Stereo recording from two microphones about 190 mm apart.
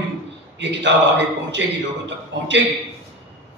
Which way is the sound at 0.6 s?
70° right (ahead or behind).